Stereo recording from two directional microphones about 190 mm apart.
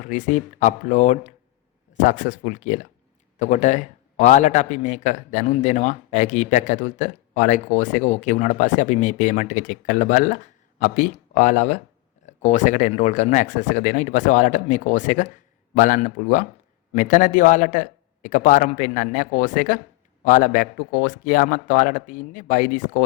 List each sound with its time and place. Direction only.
0.1 s speech: 40° left (ahead or behind)